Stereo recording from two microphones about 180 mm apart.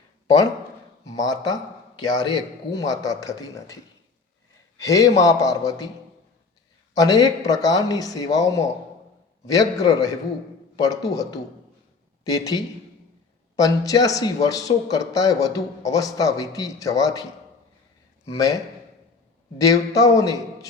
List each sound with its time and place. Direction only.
1.0 s speech: 20° left (ahead or behind)
4.8 s speech: 20° left (ahead or behind)
6.9 s speech: 20° left (ahead or behind)
18.3 s speech: 20° left (ahead or behind)